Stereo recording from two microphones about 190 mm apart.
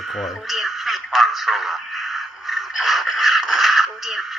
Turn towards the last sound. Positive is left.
turn(degrees=0)  # may be behind; listen again after turning